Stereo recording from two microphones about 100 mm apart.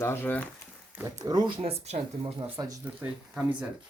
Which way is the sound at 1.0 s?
35° right (ahead or behind).